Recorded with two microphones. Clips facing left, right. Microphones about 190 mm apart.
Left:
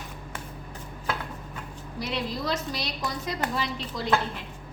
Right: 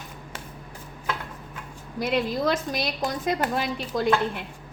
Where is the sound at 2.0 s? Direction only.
50° right (ahead or behind).